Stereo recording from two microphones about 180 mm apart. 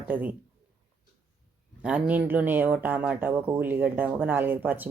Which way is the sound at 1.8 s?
10° right (ahead or behind).